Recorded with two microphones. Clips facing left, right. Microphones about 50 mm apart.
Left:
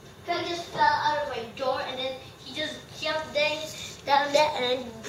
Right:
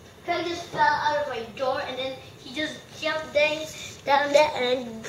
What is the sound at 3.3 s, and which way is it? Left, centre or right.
Child singing, centre.